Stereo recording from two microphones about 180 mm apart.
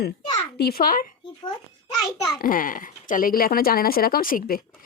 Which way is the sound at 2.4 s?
50° left (ahead or behind).